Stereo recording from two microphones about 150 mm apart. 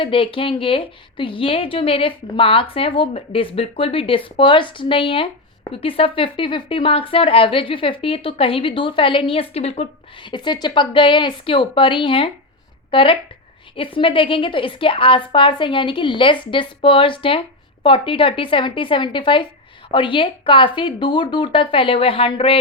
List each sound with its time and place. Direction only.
0.0 s a woman's voice: 35° left (ahead or behind)
10.3 s a woman's voice: 30° left (ahead or behind)